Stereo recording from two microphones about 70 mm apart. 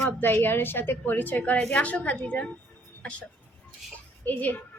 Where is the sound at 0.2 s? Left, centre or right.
Left.